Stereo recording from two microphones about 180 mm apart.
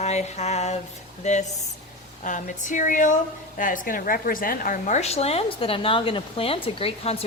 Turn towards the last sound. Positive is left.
turn(degrees=35)  # may be behind; listen again after turning